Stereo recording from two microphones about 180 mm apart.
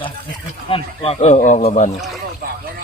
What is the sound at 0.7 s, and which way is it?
Speech, 35° left (ahead or behind).